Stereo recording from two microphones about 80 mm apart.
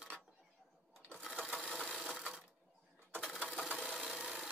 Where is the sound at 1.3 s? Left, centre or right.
Centre.